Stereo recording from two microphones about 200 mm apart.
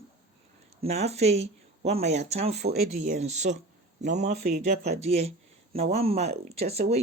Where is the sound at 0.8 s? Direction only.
30° right (ahead or behind).